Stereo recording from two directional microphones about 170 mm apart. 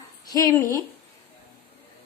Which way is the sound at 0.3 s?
20° left (ahead or behind).